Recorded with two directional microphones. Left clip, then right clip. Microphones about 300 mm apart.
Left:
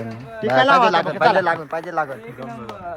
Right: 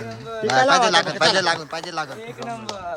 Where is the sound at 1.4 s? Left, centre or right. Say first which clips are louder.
Left 2 dB; centre.